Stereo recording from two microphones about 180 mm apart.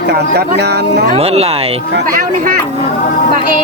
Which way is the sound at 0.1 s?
65° right (ahead or behind).